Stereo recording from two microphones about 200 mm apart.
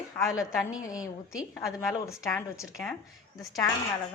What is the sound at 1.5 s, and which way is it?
A woman's voice, 15° left (ahead or behind).